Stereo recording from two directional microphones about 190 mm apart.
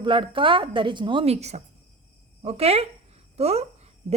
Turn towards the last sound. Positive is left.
turn(degrees=-35)  # may be behind; listen again after turning